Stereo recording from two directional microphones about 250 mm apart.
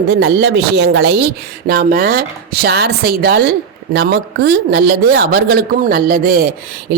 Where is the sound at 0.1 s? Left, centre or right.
Right.